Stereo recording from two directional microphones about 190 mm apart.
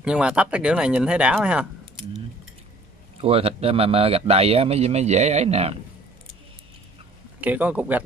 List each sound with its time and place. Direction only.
0.0 s speech: 5° right (ahead or behind)
3.2 s speech: 30° right (ahead or behind)
7.3 s a man's voice: 10° right (ahead or behind)